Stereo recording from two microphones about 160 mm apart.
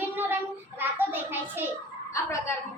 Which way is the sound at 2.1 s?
20° left (ahead or behind).